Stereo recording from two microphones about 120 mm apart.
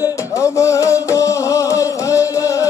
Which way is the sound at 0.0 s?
25° left (ahead or behind).